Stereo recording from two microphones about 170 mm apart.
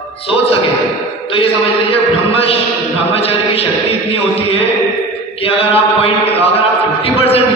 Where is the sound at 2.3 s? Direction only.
35° left (ahead or behind).